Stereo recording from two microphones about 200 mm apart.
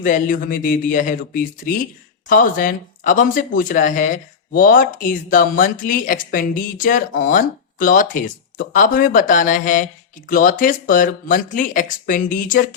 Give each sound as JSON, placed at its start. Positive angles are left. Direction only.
{"t": 0.0, "sound": "speech", "side_deg": 45}